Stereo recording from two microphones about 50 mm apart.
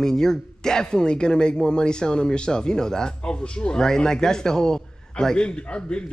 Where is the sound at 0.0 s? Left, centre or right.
Centre.